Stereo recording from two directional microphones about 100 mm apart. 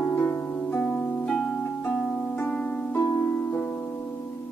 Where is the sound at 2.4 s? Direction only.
15° left (ahead or behind).